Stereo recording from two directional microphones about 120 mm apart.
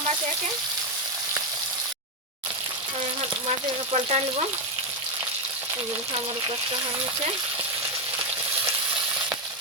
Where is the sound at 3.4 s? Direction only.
60° right (ahead or behind).